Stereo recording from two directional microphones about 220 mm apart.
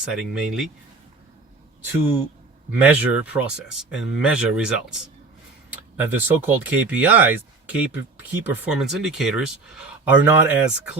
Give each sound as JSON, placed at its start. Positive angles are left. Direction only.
{"t": 0.0, "sound": "speech", "side_deg": -5}
{"t": 2.8, "sound": "speech", "side_deg": -10}